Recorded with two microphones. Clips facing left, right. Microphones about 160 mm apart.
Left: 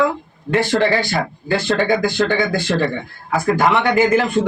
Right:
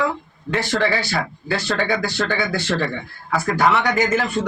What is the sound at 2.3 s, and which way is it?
Speech, 15° left (ahead or behind).